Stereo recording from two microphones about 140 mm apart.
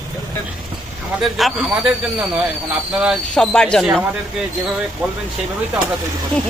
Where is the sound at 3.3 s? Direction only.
5° left (ahead or behind).